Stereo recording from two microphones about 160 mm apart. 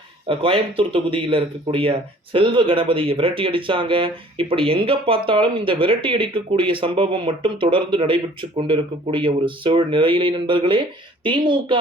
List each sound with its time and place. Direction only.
0.3 s speech: 35° right (ahead or behind)